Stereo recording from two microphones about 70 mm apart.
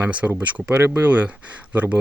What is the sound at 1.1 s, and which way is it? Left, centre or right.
Speech, right.